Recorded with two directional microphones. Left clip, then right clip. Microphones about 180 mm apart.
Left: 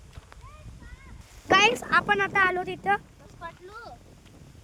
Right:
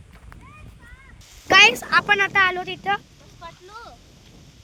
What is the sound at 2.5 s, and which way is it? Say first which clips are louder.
Speech: right 2 dB; 15° left (ahead or behind).